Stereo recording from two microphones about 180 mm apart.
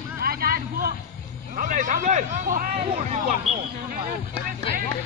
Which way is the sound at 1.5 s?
45° right (ahead or behind).